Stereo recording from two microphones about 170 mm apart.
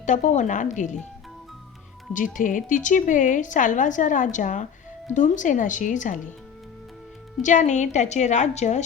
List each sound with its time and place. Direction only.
0.0 s a woman's voice: 45° left (ahead or behind)
2.1 s a woman's voice: 50° left (ahead or behind)
7.4 s a woman's voice: 45° left (ahead or behind)